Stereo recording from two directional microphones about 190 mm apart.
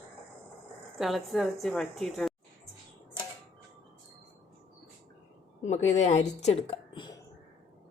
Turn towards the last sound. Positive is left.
turn(degrees=25)  # may be behind; listen again after turning